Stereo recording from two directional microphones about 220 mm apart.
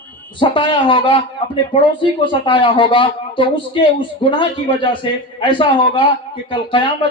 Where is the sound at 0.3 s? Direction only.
20° left (ahead or behind).